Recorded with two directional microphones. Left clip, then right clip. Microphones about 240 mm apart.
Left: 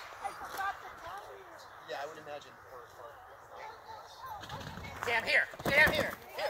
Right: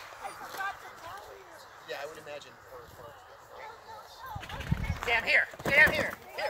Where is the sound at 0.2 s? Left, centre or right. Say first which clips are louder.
Even; right.